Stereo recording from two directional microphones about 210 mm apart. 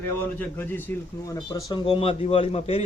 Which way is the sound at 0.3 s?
10° left (ahead or behind).